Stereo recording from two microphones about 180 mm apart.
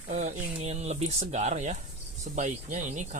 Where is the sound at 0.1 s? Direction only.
45° right (ahead or behind).